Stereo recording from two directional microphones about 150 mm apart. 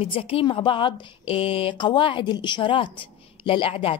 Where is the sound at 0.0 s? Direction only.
40° left (ahead or behind).